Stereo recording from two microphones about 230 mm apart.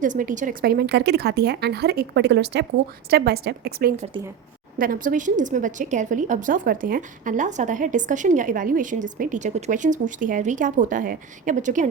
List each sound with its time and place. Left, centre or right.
0.0 s a woman's voice: right